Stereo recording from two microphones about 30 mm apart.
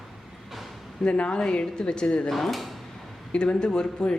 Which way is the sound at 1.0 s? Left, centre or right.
Left.